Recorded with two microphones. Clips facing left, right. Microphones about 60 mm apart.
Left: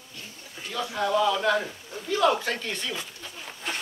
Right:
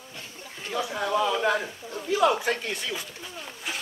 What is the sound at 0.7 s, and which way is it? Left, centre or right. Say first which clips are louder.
A man's voice: left 1 dB; centre.